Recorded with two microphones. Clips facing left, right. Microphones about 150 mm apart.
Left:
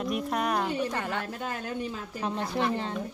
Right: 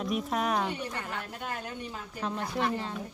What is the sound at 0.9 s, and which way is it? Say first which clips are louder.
Speech: left 5 dB; 80° left.